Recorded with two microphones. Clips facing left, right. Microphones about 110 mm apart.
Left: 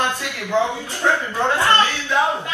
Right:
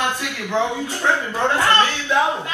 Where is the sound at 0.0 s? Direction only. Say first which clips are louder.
Even; 15° right (ahead or behind).